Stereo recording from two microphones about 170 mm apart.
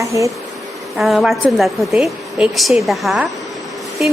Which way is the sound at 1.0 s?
Centre (ahead or behind).